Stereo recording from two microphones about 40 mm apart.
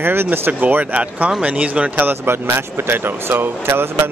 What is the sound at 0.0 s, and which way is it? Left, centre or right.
Speech, right.